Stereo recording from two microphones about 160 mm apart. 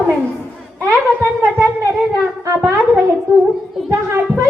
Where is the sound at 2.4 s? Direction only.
15° right (ahead or behind).